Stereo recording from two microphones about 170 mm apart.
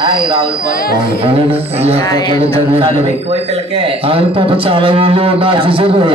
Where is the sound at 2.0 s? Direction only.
20° left (ahead or behind).